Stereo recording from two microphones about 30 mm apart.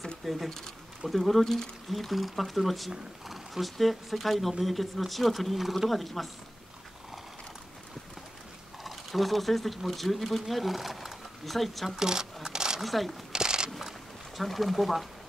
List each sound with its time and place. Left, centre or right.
0.2 s speech: centre
3.3 s a sound: centre
3.7 s speech: centre
8.8 s speech: centre
12.0 s speech: right
12.4 s zipper: right
12.8 s speech: centre
13.3 s a sound: right
14.3 s speech: centre